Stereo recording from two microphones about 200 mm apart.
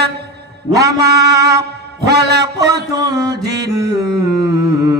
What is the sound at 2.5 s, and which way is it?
Mantra, 15° right (ahead or behind).